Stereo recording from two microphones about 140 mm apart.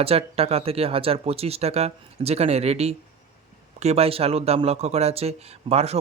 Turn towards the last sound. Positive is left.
turn(degrees=-50)  # may be behind; listen again after turning